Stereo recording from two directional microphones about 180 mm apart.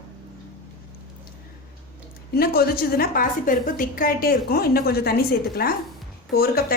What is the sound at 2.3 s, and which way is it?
A woman's voice, 55° left (ahead or behind).